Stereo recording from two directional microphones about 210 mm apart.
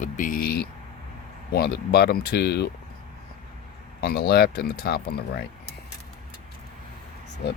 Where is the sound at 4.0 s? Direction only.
50° left (ahead or behind).